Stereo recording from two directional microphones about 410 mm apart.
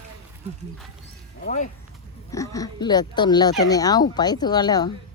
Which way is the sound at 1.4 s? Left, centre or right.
Centre.